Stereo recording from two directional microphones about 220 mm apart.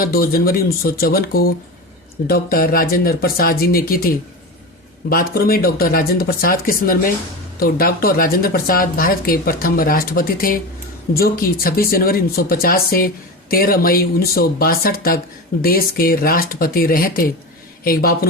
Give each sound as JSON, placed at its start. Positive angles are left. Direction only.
{"t": 0.0, "sound": "speech", "side_deg": 45}